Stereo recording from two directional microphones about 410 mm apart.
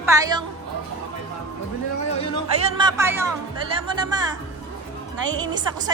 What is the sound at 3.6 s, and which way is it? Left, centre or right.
Speech, centre.